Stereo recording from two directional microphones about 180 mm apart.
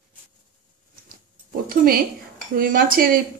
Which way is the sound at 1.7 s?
55° right (ahead or behind).